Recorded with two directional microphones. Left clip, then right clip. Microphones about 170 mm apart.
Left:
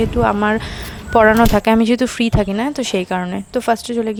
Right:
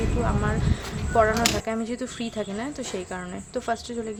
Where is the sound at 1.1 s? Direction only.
65° left (ahead or behind).